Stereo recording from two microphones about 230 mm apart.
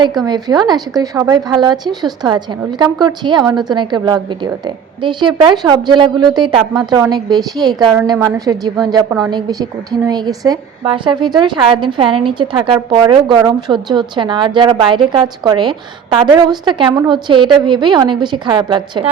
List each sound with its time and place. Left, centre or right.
0.3 s a woman's voice: centre